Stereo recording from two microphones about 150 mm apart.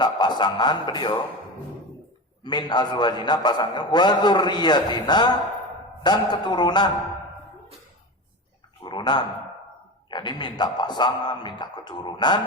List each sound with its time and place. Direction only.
0.0 s a man's voice: 30° left (ahead or behind)
2.4 s a man's voice: 30° left (ahead or behind)
8.8 s a sound: 30° left (ahead or behind)
10.1 s a man's voice: 30° left (ahead or behind)